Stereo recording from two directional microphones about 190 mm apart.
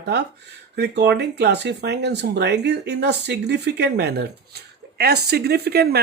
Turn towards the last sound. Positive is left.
turn(degrees=-55)  # may be behind; listen again after turning